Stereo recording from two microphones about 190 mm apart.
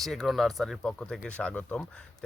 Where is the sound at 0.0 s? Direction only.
Centre (ahead or behind).